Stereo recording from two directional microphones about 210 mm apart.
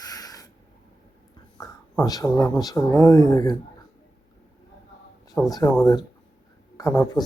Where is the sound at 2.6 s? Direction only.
15° left (ahead or behind).